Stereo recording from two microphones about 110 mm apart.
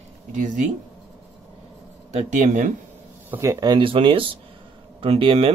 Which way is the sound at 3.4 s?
35° right (ahead or behind).